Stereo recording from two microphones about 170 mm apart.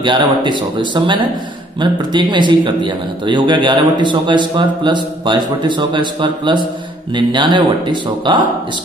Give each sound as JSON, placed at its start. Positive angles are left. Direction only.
{"t": 0.0, "sound": "a man's voice", "side_deg": -30}